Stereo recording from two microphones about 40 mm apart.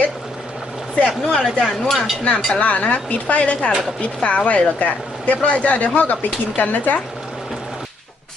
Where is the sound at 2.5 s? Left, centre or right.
Left.